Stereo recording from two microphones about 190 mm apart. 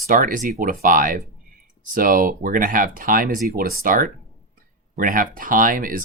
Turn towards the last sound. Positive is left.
turn(degrees=-45)  # may be behind; listen again after turning